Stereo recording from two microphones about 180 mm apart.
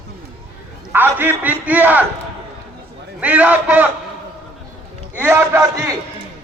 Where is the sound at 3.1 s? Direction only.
10° right (ahead or behind).